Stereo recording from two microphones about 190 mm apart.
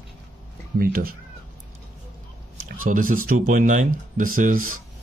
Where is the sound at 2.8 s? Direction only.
45° right (ahead or behind).